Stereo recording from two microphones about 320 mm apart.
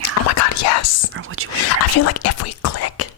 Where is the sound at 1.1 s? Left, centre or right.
Right.